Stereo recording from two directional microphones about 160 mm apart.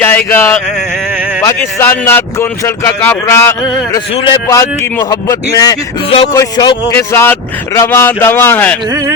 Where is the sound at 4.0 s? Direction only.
35° left (ahead or behind).